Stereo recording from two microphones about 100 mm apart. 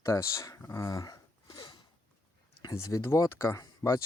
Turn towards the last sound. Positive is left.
turn(degrees=30)  # may be behind; listen again after turning